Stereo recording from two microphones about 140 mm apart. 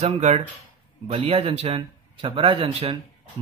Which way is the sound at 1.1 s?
45° right (ahead or behind).